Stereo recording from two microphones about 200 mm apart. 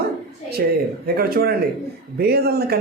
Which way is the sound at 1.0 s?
50° right (ahead or behind).